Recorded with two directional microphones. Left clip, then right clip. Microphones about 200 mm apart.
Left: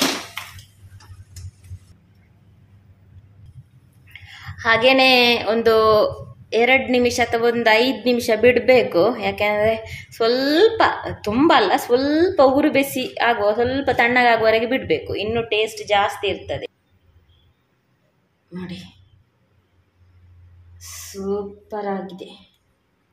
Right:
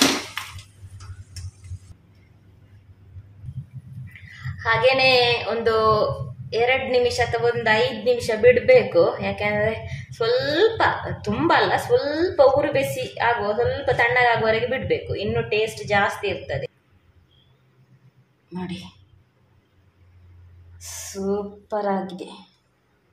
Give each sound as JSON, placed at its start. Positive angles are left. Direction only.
{"t": 4.3, "sound": "a woman's voice", "side_deg": 40}
{"t": 18.5, "sound": "a sound", "side_deg": -5}
{"t": 20.8, "sound": "speech", "side_deg": -10}